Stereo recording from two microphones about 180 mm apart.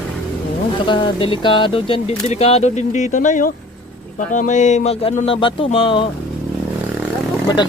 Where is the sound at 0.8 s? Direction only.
30° left (ahead or behind).